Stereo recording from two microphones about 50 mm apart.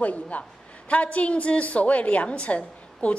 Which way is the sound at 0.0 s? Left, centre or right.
Left.